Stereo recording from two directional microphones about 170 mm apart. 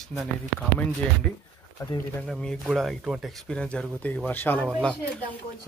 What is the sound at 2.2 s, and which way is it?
Speech, centre (ahead or behind).